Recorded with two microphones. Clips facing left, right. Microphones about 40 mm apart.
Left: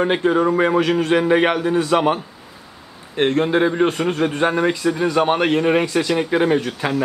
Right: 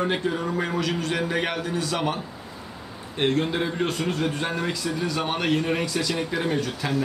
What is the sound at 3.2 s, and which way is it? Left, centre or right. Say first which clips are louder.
A man's voice: left 7 dB; left.